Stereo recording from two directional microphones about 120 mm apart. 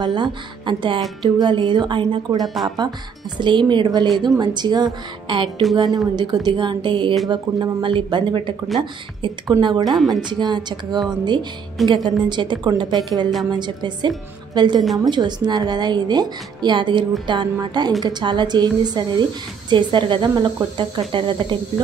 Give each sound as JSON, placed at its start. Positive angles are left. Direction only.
{"t": 0.0, "sound": "speech", "side_deg": -40}
{"t": 9.6, "sound": "speech", "side_deg": -40}